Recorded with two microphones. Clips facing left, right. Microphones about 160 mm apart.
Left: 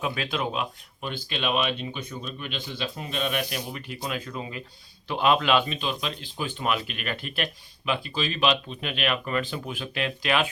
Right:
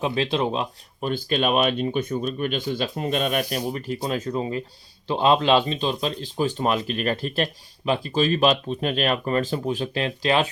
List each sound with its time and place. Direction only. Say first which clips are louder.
0.0 s speech: right 6 dB; 30° right (ahead or behind)
1.1 s speech: right 6 dB; 45° right (ahead or behind)